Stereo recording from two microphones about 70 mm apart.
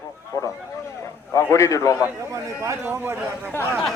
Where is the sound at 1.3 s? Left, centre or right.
Left.